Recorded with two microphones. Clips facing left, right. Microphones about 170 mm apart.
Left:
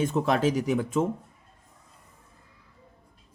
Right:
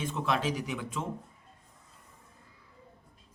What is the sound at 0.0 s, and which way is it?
Speech, 45° left (ahead or behind).